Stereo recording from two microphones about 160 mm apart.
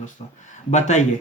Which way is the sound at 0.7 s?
45° left (ahead or behind).